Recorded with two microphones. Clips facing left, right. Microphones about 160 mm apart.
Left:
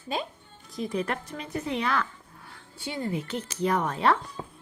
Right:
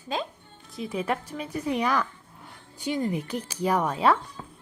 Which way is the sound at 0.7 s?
5° right (ahead or behind).